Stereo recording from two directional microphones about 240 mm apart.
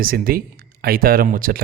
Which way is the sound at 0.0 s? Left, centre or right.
Right.